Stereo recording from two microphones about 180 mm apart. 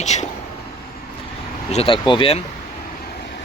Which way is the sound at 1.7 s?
30° left (ahead or behind).